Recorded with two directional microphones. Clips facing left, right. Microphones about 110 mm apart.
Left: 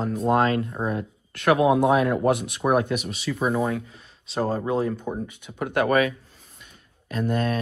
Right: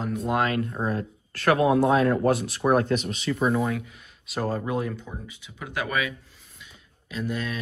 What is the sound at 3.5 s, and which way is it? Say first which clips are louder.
Speech: left 1 dB; 25° left (ahead or behind).